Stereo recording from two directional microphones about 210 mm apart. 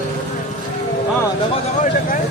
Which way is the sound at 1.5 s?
35° left (ahead or behind).